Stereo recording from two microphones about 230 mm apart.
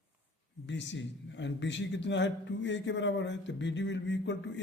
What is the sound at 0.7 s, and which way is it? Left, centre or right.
A man's voice, left.